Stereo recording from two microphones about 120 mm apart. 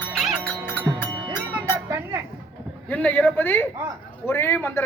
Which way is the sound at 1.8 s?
20° right (ahead or behind).